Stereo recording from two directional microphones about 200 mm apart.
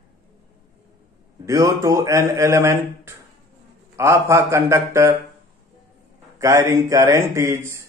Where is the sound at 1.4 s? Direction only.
15° right (ahead or behind).